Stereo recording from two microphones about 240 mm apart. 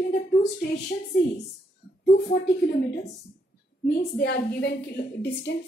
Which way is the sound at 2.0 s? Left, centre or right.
Left.